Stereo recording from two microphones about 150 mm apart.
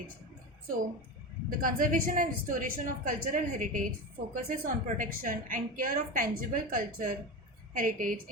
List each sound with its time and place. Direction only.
1.5 s a woman's voice: 65° right (ahead or behind)